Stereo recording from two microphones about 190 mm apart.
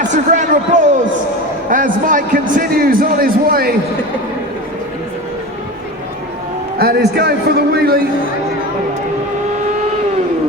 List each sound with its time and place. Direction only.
0.0 s speech: 40° right (ahead or behind)
6.7 s a man's voice: 55° right (ahead or behind)